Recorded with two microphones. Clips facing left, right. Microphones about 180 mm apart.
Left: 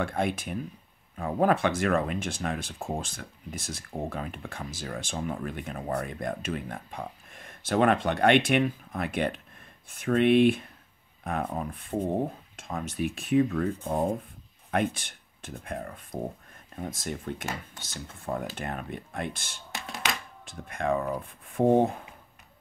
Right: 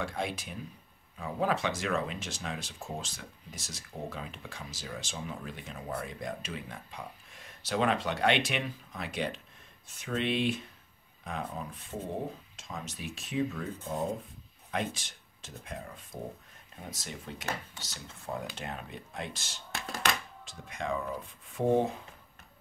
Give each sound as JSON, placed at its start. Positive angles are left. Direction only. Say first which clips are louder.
{"t": 0.0, "sound": "speech", "louder": "left 6 dB", "side_deg": 55}